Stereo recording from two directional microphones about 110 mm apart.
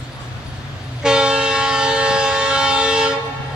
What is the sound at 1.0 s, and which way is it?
Train, 5° right (ahead or behind).